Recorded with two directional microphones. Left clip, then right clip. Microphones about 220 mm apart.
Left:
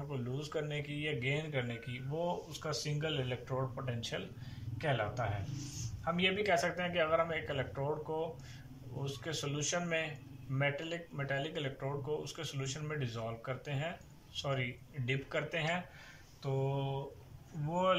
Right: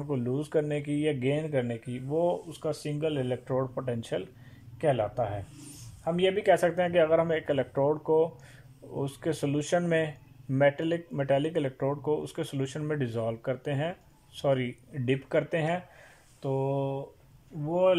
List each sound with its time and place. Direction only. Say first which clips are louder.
0.1 s speech: right 12 dB; 35° right (ahead or behind)